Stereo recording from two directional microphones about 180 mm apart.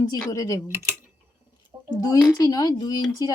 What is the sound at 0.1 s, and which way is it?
Speech, 20° left (ahead or behind).